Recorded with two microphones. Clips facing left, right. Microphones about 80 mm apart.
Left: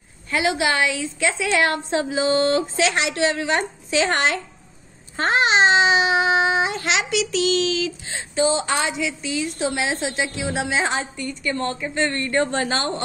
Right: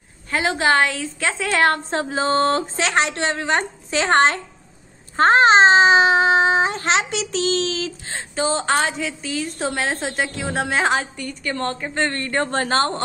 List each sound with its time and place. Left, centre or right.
0.3 s babbling: right
1.9 s a woman's voice: right
5.1 s babbling: right